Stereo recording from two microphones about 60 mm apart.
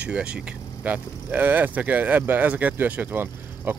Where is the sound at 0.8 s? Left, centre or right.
Right.